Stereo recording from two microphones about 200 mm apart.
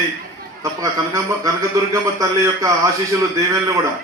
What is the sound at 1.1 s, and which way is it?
A man's voice, 15° right (ahead or behind).